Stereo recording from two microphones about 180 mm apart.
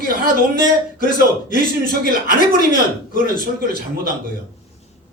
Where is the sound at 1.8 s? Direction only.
55° right (ahead or behind).